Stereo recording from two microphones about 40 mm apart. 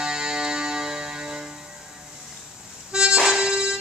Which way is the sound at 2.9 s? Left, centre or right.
Right.